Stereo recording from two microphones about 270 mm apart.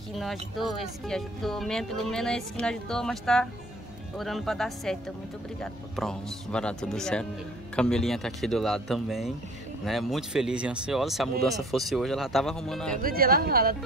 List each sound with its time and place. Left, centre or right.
0.1 s speech: centre
13.0 s speech: right